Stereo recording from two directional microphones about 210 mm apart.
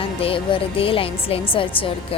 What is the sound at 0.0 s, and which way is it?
A woman's voice, 25° left (ahead or behind).